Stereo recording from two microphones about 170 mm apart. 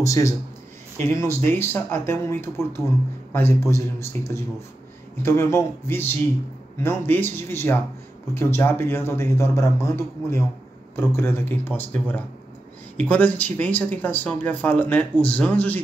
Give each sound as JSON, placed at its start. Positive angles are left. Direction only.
{"t": 0.0, "sound": "speech", "side_deg": 20}
{"t": 5.2, "sound": "speech", "side_deg": 15}